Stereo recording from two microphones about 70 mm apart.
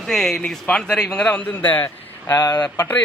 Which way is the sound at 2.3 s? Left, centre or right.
Left.